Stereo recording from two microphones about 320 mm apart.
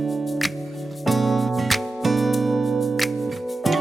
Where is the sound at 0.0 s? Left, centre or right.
Centre.